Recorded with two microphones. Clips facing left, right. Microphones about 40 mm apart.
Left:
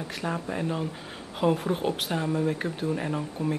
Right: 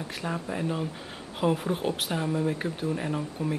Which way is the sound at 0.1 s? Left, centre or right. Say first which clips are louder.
Left 2 dB; centre.